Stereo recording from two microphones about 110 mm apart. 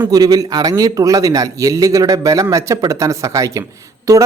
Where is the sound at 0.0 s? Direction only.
35° right (ahead or behind).